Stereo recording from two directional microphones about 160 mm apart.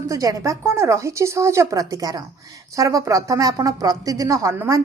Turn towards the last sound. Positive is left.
turn(degrees=-20)  # may be behind; listen again after turning